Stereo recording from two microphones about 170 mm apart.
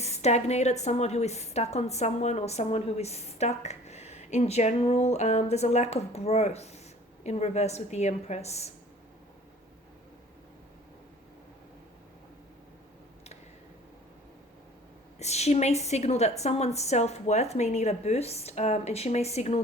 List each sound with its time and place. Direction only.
0.0 s a woman's voice: 40° left (ahead or behind)
15.2 s a woman's voice: 40° left (ahead or behind)